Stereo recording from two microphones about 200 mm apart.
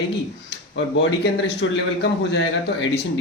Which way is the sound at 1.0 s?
65° left (ahead or behind).